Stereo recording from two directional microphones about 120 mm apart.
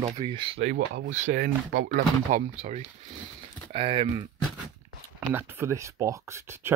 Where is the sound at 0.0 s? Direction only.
40° right (ahead or behind).